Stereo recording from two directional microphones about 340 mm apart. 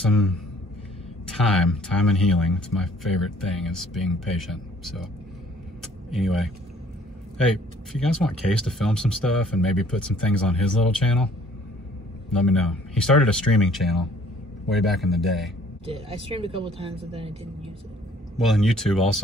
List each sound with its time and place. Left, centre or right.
1.3 s speech: centre
5.8 s vehicle: centre
7.3 s speech: centre
12.3 s speech: centre
15.8 s speech: centre
18.4 s speech: centre